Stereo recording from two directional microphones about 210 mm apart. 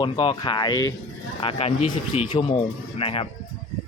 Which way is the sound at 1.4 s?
25° left (ahead or behind).